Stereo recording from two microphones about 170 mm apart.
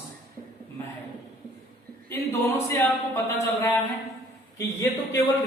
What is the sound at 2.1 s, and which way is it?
Speech, 15° left (ahead or behind).